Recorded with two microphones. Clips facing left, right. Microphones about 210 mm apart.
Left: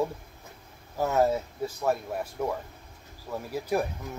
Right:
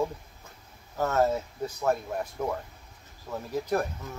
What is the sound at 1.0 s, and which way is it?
Speech, 10° left (ahead or behind).